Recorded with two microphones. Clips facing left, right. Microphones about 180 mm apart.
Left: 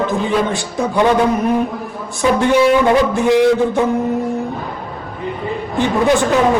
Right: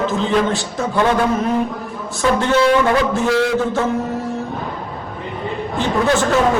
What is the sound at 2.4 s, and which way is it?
A man's voice, 15° left (ahead or behind).